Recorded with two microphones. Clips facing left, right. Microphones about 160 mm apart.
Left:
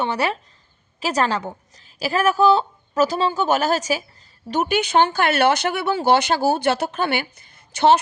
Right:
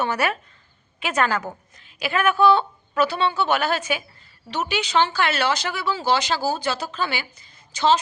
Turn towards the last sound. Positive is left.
turn(degrees=60)  # may be behind; listen again after turning